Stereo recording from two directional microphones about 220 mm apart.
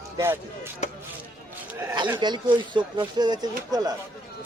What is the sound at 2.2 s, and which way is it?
Speech, 20° right (ahead or behind).